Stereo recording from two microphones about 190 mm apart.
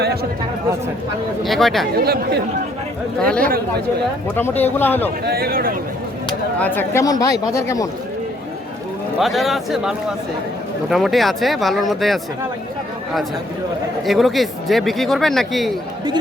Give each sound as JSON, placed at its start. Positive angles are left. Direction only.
{"t": 0.0, "sound": "speech", "side_deg": -55}
{"t": 1.5, "sound": "speech", "side_deg": 0}
{"t": 2.0, "sound": "speech", "side_deg": -55}
{"t": 3.2, "sound": "speech", "side_deg": 5}
{"t": 5.3, "sound": "speech", "side_deg": -55}
{"t": 6.6, "sound": "speech", "side_deg": 10}
{"t": 9.1, "sound": "speech", "side_deg": 0}
{"t": 14.0, "sound": "speech", "side_deg": 0}